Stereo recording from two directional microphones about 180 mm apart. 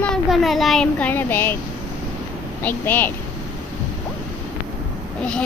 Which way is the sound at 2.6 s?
10° left (ahead or behind).